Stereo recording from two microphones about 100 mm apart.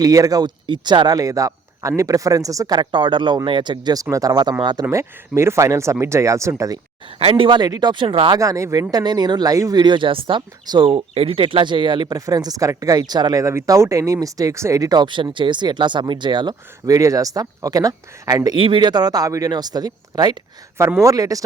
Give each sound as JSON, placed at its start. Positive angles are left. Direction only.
{"t": 0.0, "sound": "speech", "side_deg": -35}
{"t": 2.9, "sound": "speech", "side_deg": -50}
{"t": 4.1, "sound": "speech", "side_deg": -35}
{"t": 4.9, "sound": "speech", "side_deg": -30}
{"t": 7.2, "sound": "speech", "side_deg": -60}
{"t": 8.0, "sound": "speech", "side_deg": -65}
{"t": 8.4, "sound": "speech", "side_deg": -30}
{"t": 9.7, "sound": "speech", "side_deg": -50}
{"t": 10.8, "sound": "speech", "side_deg": -75}
{"t": 13.4, "sound": "speech", "side_deg": -30}
{"t": 18.5, "sound": "speech", "side_deg": -55}